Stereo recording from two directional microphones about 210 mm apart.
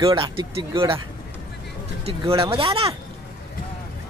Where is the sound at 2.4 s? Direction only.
25° right (ahead or behind).